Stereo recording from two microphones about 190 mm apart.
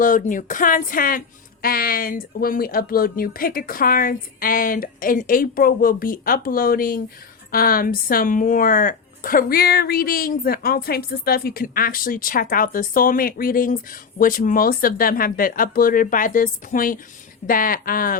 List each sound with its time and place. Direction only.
0.0 s speech: 45° left (ahead or behind)